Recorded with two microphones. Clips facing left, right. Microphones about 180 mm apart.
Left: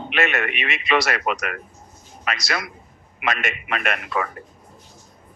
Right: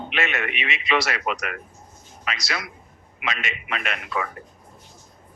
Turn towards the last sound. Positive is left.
turn(degrees=55)  # may be behind; listen again after turning